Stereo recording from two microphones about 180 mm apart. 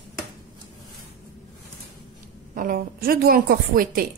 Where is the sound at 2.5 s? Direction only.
50° right (ahead or behind).